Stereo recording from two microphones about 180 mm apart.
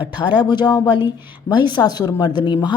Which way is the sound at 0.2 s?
25° left (ahead or behind).